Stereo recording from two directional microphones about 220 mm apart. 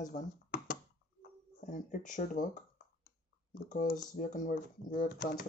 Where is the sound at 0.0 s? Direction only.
35° left (ahead or behind).